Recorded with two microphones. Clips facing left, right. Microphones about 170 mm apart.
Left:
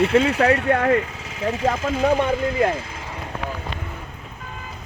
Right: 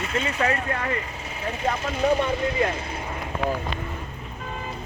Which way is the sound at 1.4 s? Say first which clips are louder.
Left 5 dB; 90° left.